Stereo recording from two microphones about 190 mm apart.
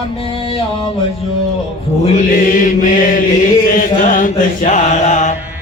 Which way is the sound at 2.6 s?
45° left (ahead or behind).